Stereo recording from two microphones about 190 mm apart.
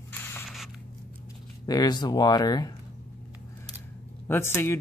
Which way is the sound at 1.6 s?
20° left (ahead or behind).